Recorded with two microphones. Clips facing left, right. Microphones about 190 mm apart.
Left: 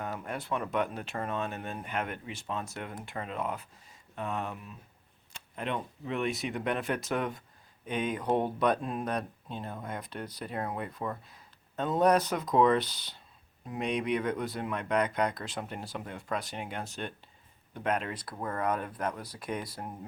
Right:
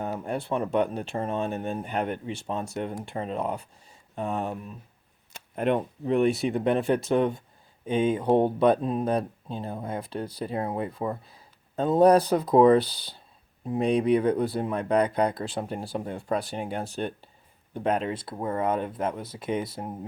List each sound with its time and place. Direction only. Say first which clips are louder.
0.2 s speech: right 6 dB; 30° right (ahead or behind)
5.3 s speech: right 10 dB; 50° right (ahead or behind); by 20.0 s 25° right (ahead or behind)